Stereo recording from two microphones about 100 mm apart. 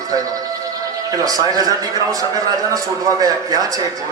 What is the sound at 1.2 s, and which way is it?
A man's voice, 40° right (ahead or behind).